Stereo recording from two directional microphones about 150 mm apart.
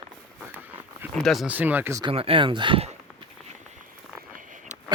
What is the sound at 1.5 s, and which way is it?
Speech, 10° right (ahead or behind).